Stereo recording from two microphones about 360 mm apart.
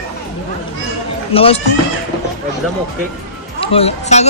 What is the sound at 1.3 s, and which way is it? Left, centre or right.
Speech, centre.